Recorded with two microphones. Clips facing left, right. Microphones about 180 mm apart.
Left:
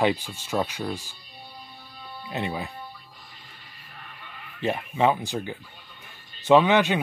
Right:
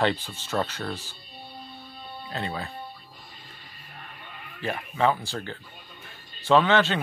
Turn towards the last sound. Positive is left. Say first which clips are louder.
# left 2 dB
turn(degrees=15)  # may be behind; listen again after turning